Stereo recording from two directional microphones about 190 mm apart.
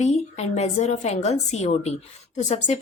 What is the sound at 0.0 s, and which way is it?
A woman's voice, 35° left (ahead or behind).